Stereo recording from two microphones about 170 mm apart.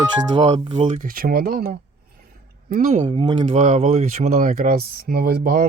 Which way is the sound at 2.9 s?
35° right (ahead or behind).